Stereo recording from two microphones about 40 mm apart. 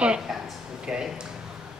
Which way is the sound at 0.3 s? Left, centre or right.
Centre.